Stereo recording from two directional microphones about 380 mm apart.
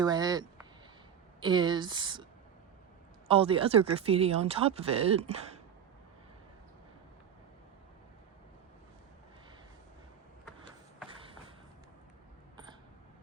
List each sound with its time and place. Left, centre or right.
0.0 s speech: centre
3.2 s speech: centre